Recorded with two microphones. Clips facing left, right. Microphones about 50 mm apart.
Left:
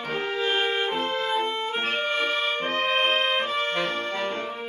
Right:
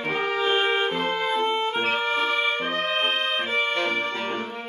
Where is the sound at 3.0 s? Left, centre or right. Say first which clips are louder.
Left 2 dB; centre.